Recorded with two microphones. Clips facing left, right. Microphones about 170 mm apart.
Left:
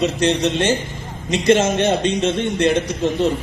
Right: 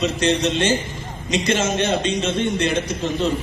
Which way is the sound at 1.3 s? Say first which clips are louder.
Left 5 dB; 55° left (ahead or behind).